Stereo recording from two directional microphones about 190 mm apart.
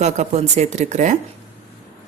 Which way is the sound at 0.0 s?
35° right (ahead or behind).